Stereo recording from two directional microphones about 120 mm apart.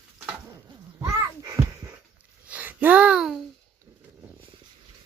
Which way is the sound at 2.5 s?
15° right (ahead or behind).